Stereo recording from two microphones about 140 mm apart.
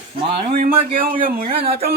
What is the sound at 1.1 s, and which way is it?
Speech, 90° right.